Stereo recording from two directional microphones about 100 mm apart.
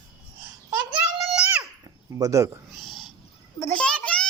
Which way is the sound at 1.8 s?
35° right (ahead or behind).